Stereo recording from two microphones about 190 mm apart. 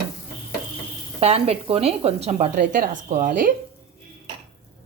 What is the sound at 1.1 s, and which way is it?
A woman's voice, 30° right (ahead or behind).